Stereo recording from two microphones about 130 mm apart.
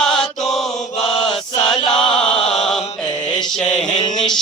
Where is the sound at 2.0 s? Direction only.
5° left (ahead or behind).